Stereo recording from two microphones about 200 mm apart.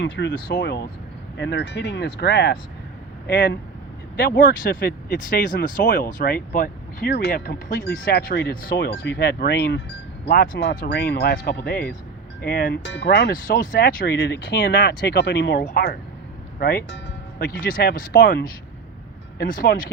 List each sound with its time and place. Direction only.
0.0 s speech: 60° left (ahead or behind)
4.2 s speech: 50° left (ahead or behind)
13.3 s speech: 40° left (ahead or behind); by 15.6 s 65° left (ahead or behind)
15.6 s speech: 45° left (ahead or behind)